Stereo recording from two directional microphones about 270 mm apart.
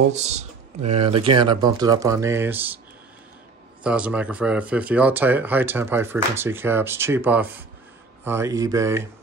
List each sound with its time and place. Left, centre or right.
0.1 s speech: right; by 2.8 s centre
3.8 s speech: centre